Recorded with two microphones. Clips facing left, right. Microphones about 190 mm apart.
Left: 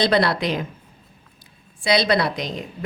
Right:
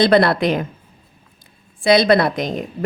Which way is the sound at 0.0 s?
55° right (ahead or behind).